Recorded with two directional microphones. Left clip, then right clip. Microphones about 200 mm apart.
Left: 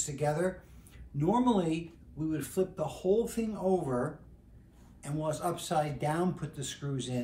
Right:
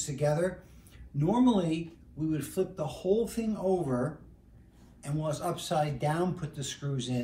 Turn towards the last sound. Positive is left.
turn(degrees=10)  # may be behind; listen again after turning